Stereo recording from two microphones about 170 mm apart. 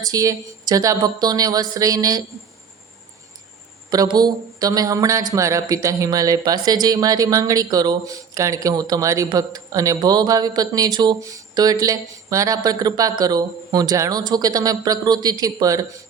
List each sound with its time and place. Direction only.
0.1 s speech: 20° right (ahead or behind)
3.8 s speech: 25° right (ahead or behind)